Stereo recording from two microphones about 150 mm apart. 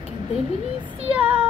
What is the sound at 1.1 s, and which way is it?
Speech, 10° right (ahead or behind).